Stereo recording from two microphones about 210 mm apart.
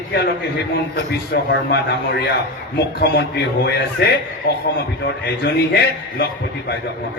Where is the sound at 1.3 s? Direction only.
50° left (ahead or behind).